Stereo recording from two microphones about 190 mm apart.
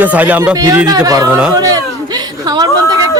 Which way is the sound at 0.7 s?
20° right (ahead or behind).